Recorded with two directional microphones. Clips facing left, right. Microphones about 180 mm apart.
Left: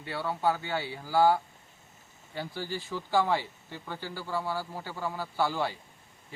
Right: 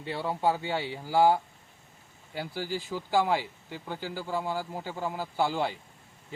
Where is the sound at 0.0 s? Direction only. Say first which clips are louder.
Right 1 dB; 25° right (ahead or behind).